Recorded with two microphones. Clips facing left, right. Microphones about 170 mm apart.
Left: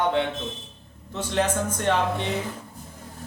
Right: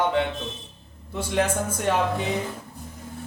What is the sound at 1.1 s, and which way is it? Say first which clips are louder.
Speech: even; 10° right (ahead or behind).